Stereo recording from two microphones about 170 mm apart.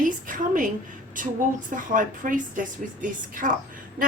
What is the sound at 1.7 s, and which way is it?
Speech, 50° right (ahead or behind).